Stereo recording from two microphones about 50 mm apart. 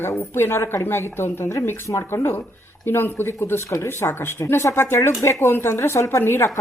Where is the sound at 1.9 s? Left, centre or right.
Left.